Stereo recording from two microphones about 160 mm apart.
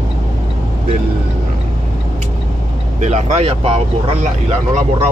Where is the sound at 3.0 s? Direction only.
45° right (ahead or behind).